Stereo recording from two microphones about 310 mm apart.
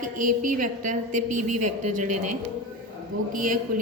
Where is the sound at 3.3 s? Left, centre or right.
Right.